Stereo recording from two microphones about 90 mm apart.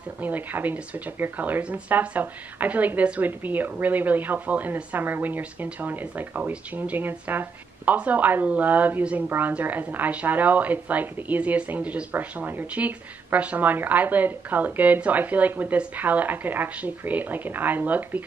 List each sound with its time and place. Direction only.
0.2 s speech: 20° right (ahead or behind)